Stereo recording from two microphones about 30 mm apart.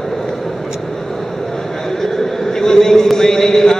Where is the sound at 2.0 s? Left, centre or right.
Centre.